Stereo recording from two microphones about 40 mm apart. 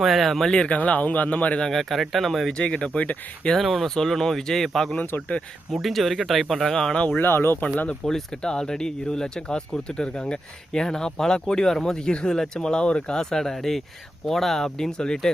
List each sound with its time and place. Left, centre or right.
0.0 s speech: centre
0.5 s speech: left
0.8 s speech: left
1.6 s speech: centre
2.5 s speech: left
3.6 s speech: centre
3.8 s speech: centre
7.2 s speech: left
8.0 s speech: centre